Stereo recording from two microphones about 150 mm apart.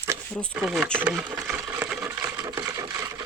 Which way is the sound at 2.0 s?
25° right (ahead or behind).